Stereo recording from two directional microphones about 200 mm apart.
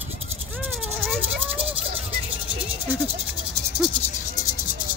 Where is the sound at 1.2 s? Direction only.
30° right (ahead or behind).